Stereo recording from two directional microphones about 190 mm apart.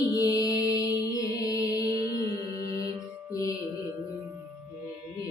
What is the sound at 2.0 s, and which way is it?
Music, 25° right (ahead or behind).